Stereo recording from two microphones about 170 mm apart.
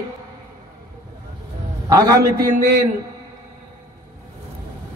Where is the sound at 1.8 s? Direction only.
20° right (ahead or behind).